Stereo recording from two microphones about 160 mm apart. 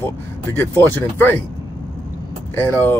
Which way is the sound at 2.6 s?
15° left (ahead or behind).